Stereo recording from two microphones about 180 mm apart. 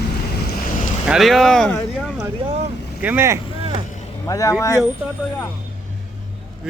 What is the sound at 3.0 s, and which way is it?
Speech, 10° right (ahead or behind).